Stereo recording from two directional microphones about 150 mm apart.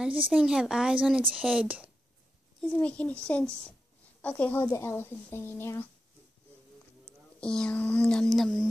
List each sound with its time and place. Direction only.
0.0 s speech: 10° right (ahead or behind)
2.6 s speech: 10° left (ahead or behind)
7.3 s speech: 5° left (ahead or behind)